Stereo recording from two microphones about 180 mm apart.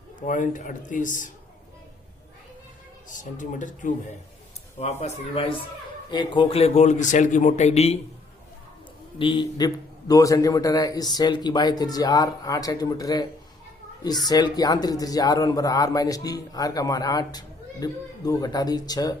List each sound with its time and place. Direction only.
0.2 s speech: 45° left (ahead or behind)
3.2 s a man's voice: 45° left (ahead or behind)
9.1 s speech: 25° left (ahead or behind)